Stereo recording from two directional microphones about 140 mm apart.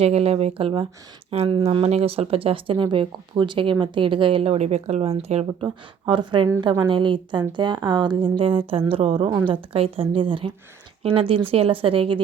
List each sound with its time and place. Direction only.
0.0 s speech: 45° right (ahead or behind)
5.6 s speech: 35° right (ahead or behind)